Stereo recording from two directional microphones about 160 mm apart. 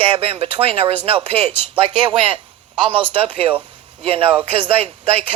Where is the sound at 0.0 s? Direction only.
35° right (ahead or behind).